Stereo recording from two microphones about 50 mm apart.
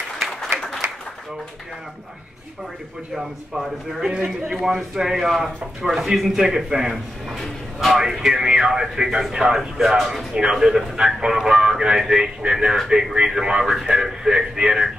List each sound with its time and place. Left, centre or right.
0.6 s applause: centre
3.2 s speech: centre
4.1 s a man's voice: right
4.6 s speech: centre